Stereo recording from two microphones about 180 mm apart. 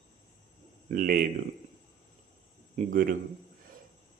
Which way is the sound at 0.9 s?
50° right (ahead or behind).